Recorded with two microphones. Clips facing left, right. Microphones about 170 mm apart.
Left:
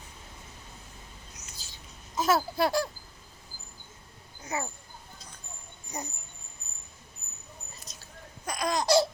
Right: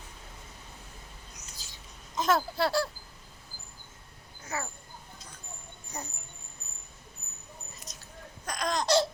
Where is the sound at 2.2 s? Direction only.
10° left (ahead or behind).